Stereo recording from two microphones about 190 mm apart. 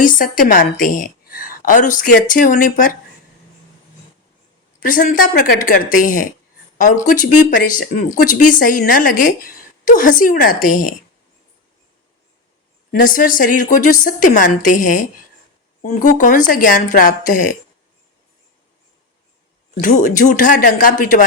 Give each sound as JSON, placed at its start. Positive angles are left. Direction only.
{"t": 0.0, "sound": "a woman's voice", "side_deg": 45}
{"t": 4.8, "sound": "a woman's voice", "side_deg": 45}
{"t": 12.9, "sound": "a woman's voice", "side_deg": 45}
{"t": 19.8, "sound": "a woman's voice", "side_deg": 45}